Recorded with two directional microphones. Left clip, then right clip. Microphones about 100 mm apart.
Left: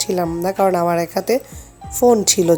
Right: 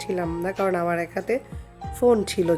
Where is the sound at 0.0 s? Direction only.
50° left (ahead or behind).